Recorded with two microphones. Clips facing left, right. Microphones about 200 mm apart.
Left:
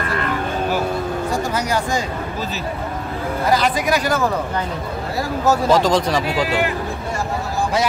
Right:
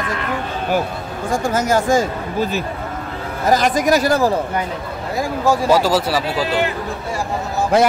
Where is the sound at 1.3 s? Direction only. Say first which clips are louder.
Right 7 dB; 50° right (ahead or behind).